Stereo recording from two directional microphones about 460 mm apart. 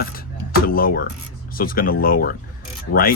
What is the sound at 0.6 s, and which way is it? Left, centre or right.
Speech, centre.